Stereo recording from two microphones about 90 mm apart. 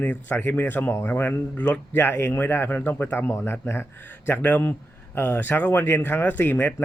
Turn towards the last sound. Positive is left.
turn(degrees=25)  # may be behind; listen again after turning